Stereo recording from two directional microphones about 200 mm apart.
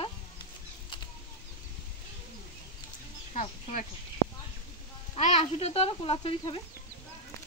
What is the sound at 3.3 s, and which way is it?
Speech, 35° left (ahead or behind).